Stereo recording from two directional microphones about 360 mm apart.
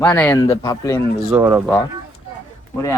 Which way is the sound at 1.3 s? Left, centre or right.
Centre.